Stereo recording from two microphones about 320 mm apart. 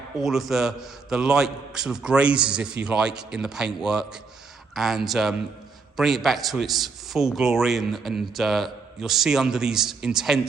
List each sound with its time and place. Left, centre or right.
0.2 s a man's voice: centre